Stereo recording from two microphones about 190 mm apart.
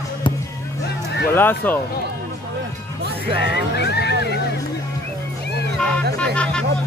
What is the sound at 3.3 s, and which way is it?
Speech, 60° left (ahead or behind).